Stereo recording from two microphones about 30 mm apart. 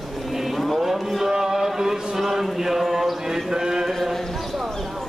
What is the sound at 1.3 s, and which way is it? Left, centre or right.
Mantra, centre.